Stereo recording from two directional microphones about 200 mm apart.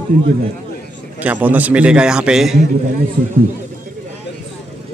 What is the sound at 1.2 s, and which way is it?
Speech, 10° right (ahead or behind).